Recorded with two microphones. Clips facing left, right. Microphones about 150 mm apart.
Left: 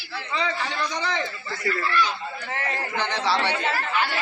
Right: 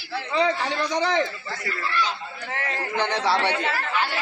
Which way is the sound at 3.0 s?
60° right (ahead or behind).